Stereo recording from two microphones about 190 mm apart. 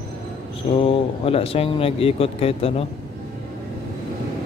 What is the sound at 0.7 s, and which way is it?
Speech, 30° left (ahead or behind).